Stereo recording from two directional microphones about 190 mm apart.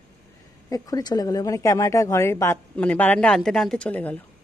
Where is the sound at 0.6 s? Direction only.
20° left (ahead or behind).